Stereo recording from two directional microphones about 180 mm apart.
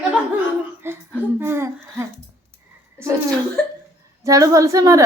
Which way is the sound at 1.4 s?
15° right (ahead or behind).